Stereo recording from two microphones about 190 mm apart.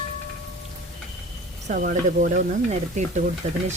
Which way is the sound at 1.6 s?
45° right (ahead or behind).